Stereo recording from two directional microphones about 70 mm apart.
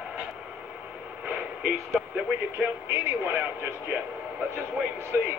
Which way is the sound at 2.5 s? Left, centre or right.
Right.